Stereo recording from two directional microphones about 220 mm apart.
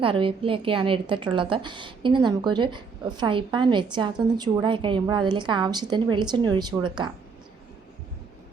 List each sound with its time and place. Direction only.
0.0 s a woman's voice: 25° right (ahead or behind)